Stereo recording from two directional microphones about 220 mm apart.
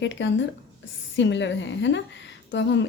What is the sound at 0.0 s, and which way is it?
A woman's voice, 55° left (ahead or behind).